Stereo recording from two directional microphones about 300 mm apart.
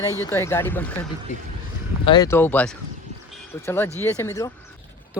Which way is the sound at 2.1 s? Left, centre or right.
Centre.